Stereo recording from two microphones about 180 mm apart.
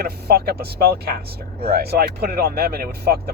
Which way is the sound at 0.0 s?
60° right (ahead or behind).